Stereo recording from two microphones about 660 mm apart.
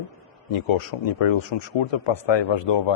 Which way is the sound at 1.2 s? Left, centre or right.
Left.